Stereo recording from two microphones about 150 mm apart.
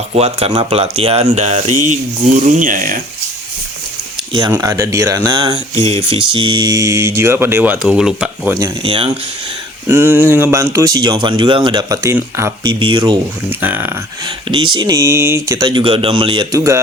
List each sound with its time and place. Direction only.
0.1 s speech: 45° right (ahead or behind); by 3.0 s 65° right (ahead or behind)
4.6 s speech: 20° right (ahead or behind)
5.7 s speech: 45° right (ahead or behind); by 8.5 s 5° right (ahead or behind)
8.8 s speech: 35° right (ahead or behind)
9.9 s speech: 15° right (ahead or behind)
12.6 s speech: 30° right (ahead or behind)
13.5 s speech: 10° right (ahead or behind)
14.5 s speech: 30° right (ahead or behind)